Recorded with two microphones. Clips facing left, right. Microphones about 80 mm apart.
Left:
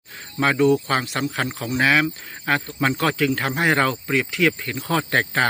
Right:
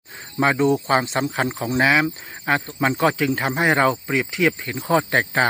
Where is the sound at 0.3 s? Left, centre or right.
Centre.